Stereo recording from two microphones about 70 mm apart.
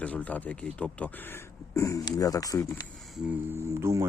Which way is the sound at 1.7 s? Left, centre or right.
Left.